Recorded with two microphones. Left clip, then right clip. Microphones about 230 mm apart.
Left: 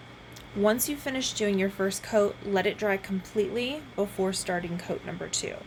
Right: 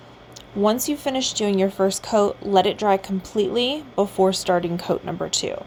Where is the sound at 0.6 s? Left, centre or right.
Right.